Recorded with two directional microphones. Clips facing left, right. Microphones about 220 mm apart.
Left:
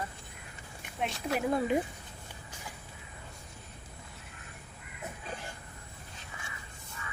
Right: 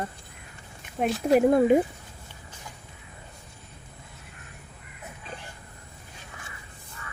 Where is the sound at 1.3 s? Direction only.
50° right (ahead or behind).